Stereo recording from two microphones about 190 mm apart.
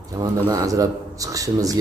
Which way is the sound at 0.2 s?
20° right (ahead or behind).